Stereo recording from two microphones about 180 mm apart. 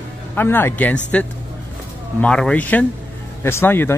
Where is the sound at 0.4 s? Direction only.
10° left (ahead or behind).